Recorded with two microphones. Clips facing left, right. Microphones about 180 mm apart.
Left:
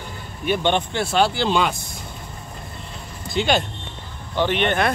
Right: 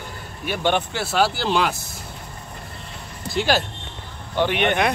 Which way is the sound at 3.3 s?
5° right (ahead or behind).